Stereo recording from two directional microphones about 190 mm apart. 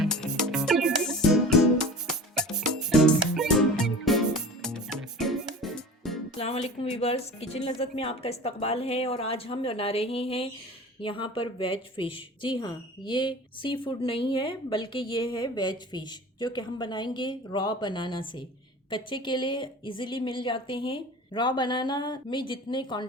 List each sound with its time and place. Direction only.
0.0 s music: centre (ahead or behind)
6.3 s a woman's voice: 30° left (ahead or behind)